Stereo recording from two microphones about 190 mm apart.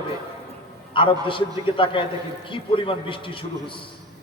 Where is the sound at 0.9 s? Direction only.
25° left (ahead or behind).